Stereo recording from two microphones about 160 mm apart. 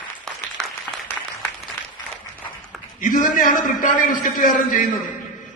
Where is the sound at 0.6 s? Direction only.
5° left (ahead or behind).